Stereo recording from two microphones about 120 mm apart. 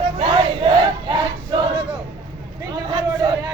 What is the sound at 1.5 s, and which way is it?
Battle cry, 35° right (ahead or behind).